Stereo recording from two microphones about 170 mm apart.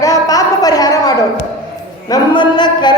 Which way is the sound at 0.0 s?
20° left (ahead or behind).